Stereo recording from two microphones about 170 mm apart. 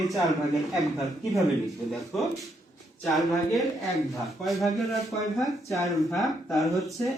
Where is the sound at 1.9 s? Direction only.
Centre (ahead or behind).